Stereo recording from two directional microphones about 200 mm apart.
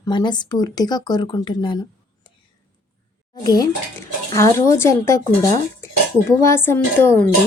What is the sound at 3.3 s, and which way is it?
Speech, 20° left (ahead or behind).